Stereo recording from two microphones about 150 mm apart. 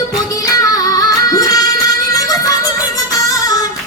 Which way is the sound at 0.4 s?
25° left (ahead or behind).